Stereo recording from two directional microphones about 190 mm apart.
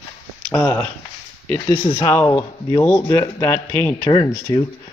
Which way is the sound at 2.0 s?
15° left (ahead or behind).